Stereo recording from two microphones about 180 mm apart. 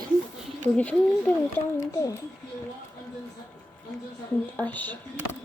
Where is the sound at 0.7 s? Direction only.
5° left (ahead or behind).